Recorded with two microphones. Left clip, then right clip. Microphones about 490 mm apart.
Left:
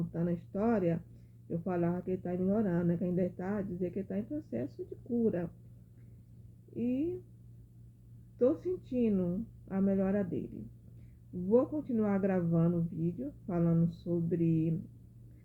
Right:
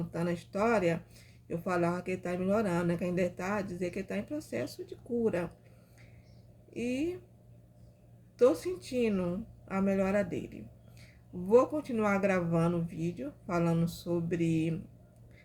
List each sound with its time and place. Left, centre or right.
0.1 s speech: centre
6.7 s speech: centre
8.4 s speech: centre
11.4 s speech: centre